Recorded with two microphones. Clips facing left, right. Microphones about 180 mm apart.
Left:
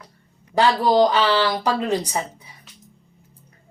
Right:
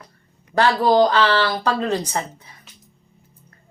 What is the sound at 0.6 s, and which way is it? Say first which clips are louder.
A woman's voice: right 1 dB; 15° left (ahead or behind).